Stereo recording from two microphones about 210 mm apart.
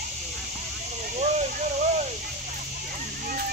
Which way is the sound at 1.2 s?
35° right (ahead or behind).